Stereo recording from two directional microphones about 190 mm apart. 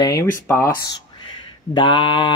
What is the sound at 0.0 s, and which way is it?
A man's voice, 15° left (ahead or behind).